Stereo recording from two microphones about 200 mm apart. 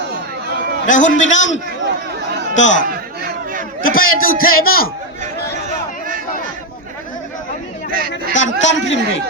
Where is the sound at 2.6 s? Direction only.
70° left (ahead or behind).